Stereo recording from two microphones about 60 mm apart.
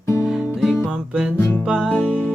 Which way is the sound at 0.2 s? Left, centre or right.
Centre.